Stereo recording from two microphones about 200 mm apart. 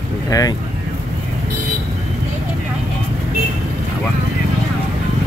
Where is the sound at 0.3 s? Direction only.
20° left (ahead or behind).